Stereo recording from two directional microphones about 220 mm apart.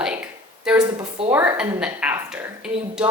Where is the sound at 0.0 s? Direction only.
5° right (ahead or behind).